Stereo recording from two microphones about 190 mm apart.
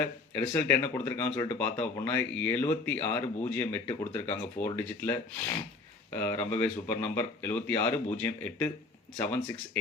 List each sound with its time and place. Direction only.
0.0 s speech: 10° left (ahead or behind)